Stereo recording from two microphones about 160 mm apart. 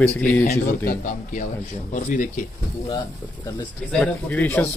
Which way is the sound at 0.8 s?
55° left (ahead or behind).